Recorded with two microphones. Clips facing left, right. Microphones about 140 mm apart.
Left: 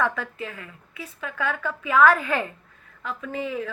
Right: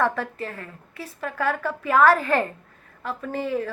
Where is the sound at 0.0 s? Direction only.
40° right (ahead or behind).